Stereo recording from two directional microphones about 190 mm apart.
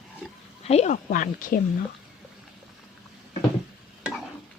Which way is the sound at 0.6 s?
35° left (ahead or behind).